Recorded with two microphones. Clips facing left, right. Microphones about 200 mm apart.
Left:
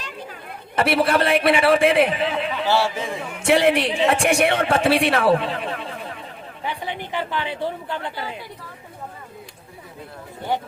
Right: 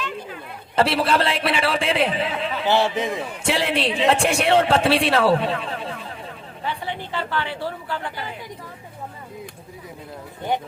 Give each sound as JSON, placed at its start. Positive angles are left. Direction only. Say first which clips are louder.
{"t": 0.8, "sound": "a man's voice", "louder": "left 1 dB", "side_deg": -30}
{"t": 2.6, "sound": "a man's voice", "louder": "right 3 dB", "side_deg": -20}
{"t": 3.3, "sound": "a man's voice", "louder": "left 8 dB", "side_deg": -30}
{"t": 5.6, "sound": "a sound", "louder": "left 1 dB", "side_deg": -30}
{"t": 6.7, "sound": "a woman's voice", "louder": "even", "side_deg": 15}